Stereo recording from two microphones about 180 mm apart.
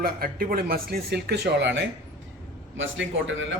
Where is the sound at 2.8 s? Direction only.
90° right.